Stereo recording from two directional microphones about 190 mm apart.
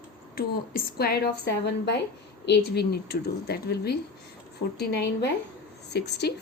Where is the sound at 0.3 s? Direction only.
50° left (ahead or behind).